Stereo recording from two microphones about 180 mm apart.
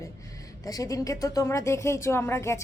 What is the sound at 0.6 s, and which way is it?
A child's voice, 20° left (ahead or behind).